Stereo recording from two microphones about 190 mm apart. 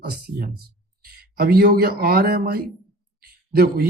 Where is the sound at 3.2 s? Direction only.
55° right (ahead or behind).